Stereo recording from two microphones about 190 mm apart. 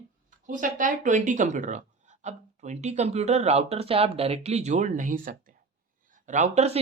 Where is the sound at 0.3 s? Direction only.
45° right (ahead or behind).